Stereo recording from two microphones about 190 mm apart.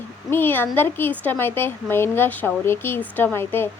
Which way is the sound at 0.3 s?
10° left (ahead or behind).